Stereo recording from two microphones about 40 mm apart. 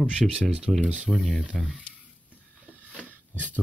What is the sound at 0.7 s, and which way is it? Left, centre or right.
Speech, centre.